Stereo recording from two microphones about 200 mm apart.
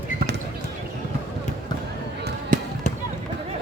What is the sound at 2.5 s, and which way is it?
Basketball bounce, 45° right (ahead or behind).